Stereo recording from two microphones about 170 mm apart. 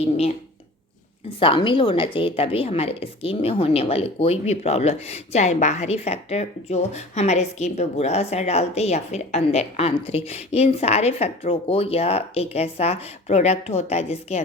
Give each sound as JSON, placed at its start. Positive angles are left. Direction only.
{"t": 0.0, "sound": "a woman's voice", "side_deg": 35}
{"t": 1.4, "sound": "a woman's voice", "side_deg": 30}